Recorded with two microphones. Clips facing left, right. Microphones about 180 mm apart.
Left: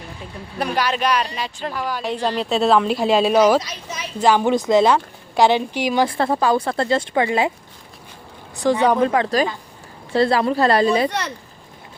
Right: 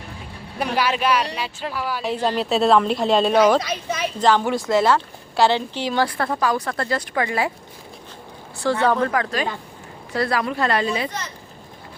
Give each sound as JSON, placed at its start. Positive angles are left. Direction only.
{"t": 0.6, "sound": "a woman's voice", "side_deg": -10}
{"t": 3.6, "sound": "speech", "side_deg": -60}
{"t": 4.2, "sound": "speech", "side_deg": 10}
{"t": 6.1, "sound": "speech", "side_deg": 25}
{"t": 8.5, "sound": "speech", "side_deg": 15}